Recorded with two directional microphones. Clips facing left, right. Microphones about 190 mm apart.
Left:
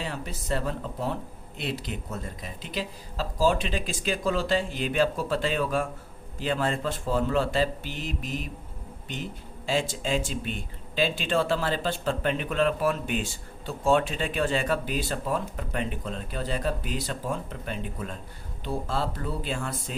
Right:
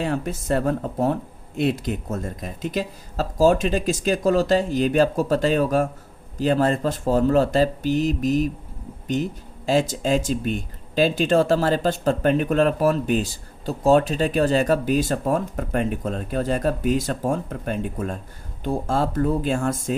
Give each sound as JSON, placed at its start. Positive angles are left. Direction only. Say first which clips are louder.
{"t": 0.0, "sound": "speech", "louder": "right 10 dB", "side_deg": -50}